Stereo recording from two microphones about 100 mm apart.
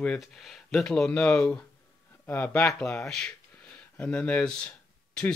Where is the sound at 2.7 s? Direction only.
5° left (ahead or behind).